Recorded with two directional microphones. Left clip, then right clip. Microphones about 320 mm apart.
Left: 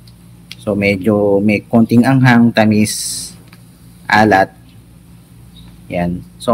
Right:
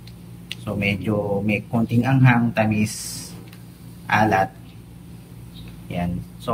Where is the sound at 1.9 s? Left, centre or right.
Centre.